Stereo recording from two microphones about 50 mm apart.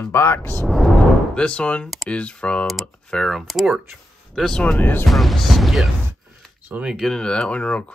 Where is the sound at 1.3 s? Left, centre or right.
Left.